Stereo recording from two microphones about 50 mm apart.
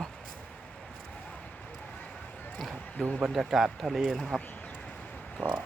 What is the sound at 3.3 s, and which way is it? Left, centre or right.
A man's voice, centre.